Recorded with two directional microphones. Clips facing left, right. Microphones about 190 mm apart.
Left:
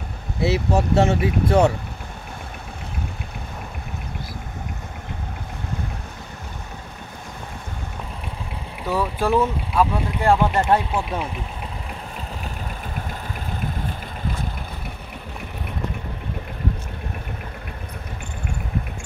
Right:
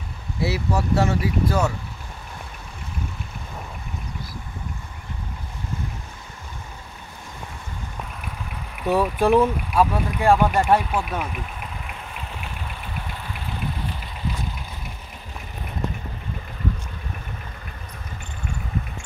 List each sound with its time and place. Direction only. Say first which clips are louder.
0.4 s speech: left 4 dB; 25° left (ahead or behind)
8.8 s speech: right 3 dB; 15° right (ahead or behind)
10.9 s speech: left 1 dB; 25° left (ahead or behind)